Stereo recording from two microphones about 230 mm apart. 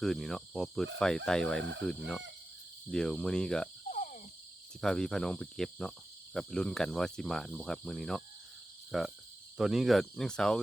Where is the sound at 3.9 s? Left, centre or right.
Left.